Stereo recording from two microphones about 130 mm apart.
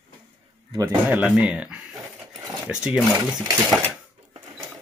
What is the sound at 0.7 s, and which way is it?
Speech, 30° right (ahead or behind).